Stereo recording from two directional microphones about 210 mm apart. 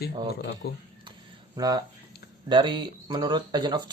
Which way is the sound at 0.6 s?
50° left (ahead or behind).